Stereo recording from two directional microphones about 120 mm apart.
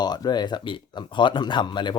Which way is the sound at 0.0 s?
35° left (ahead or behind).